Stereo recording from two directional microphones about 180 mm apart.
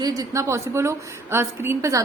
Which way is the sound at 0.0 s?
20° right (ahead or behind).